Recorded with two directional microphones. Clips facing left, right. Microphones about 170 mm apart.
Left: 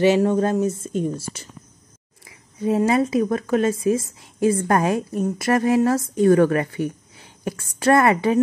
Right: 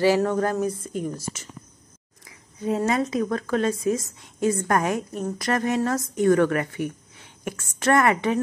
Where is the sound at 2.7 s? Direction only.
25° left (ahead or behind).